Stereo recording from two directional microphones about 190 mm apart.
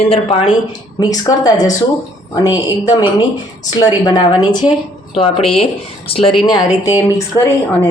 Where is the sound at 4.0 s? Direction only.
20° left (ahead or behind).